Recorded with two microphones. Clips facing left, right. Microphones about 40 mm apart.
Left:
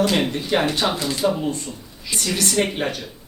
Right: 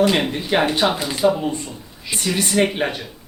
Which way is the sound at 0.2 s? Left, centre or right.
Centre.